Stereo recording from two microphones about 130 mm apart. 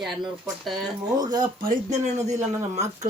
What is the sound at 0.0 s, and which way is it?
Speech, centre (ahead or behind).